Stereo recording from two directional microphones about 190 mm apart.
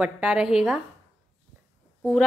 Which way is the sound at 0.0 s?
5° right (ahead or behind).